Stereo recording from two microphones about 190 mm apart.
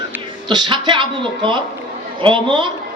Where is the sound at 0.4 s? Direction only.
25° right (ahead or behind).